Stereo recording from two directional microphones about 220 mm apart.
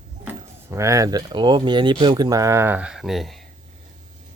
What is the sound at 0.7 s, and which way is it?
Speech, 15° right (ahead or behind).